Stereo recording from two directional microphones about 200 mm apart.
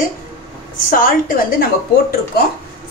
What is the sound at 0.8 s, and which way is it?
A woman's voice, 45° left (ahead or behind).